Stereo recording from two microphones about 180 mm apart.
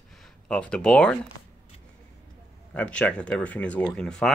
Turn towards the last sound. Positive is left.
turn(degrees=5)  # may be behind; listen again after turning